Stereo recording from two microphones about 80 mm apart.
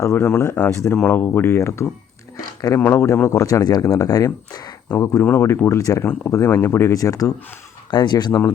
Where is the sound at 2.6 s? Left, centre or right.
Left.